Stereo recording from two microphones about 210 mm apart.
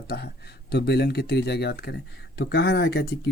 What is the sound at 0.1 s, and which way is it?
Speech, 50° left (ahead or behind).